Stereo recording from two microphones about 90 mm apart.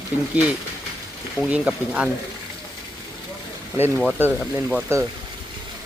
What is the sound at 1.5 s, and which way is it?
Speech, 10° right (ahead or behind).